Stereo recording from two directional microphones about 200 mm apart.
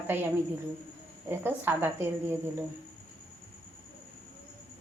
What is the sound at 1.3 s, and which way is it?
A woman's voice, 10° right (ahead or behind).